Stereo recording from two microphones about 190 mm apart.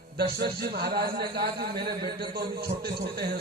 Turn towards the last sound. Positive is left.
turn(degrees=-55)  # may be behind; listen again after turning